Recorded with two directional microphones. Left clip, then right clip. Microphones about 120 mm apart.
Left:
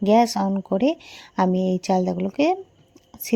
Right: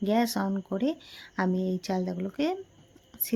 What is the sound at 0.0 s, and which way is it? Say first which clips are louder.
Speech: left 9 dB; 50° left (ahead or behind).